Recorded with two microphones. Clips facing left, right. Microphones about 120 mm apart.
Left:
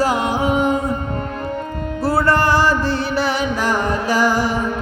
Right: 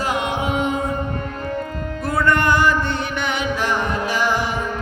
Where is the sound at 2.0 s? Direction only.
35° left (ahead or behind).